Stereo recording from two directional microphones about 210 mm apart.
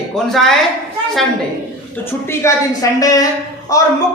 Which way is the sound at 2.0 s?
10° left (ahead or behind).